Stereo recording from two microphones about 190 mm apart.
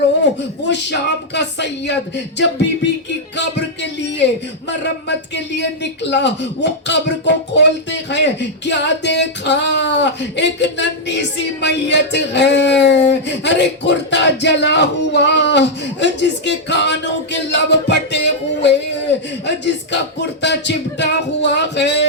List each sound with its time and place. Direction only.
0.7 s music: 65° left (ahead or behind)
3.3 s a sound: 65° left (ahead or behind)
5.0 s speech: 65° left (ahead or behind)
19.5 s music: 65° left (ahead or behind)